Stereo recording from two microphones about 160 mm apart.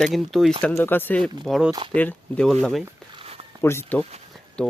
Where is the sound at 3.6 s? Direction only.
15° left (ahead or behind).